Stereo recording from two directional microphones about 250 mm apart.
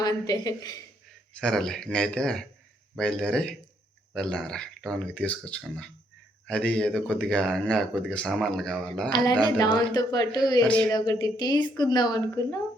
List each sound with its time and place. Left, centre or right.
0.0 s a woman's voice: centre
1.4 s speech: centre
9.0 s a woman's voice: centre